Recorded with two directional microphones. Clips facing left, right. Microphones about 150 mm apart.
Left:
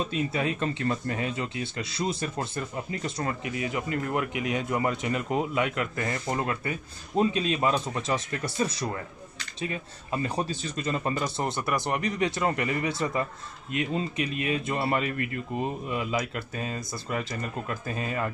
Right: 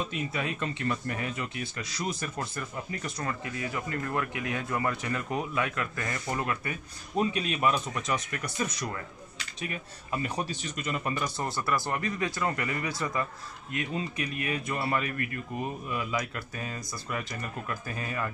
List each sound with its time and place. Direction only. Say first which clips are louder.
0.1 s speech: left 5 dB; 25° left (ahead or behind)